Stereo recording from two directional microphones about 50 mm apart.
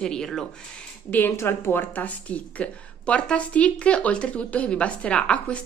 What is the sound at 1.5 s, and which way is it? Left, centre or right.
Speech, left.